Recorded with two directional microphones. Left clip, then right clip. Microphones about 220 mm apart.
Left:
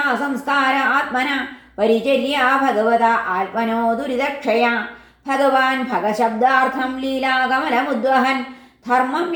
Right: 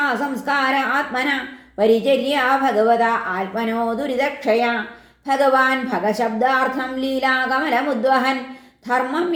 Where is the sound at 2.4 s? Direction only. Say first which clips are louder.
Left 1 dB; 30° right (ahead or behind).